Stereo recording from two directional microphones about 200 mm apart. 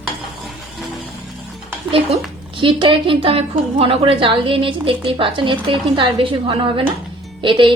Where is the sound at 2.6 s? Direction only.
25° right (ahead or behind).